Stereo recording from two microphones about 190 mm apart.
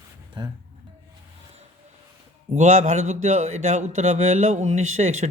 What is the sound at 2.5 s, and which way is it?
Speech, 40° right (ahead or behind).